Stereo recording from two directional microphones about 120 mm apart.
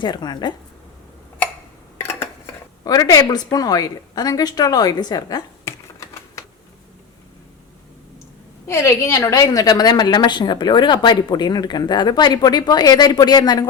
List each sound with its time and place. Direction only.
0.0 s a woman's voice: 35° left (ahead or behind)
2.8 s a woman's voice: 30° left (ahead or behind)
5.6 s typing: 25° left (ahead or behind)
8.6 s a woman's voice: 20° left (ahead or behind)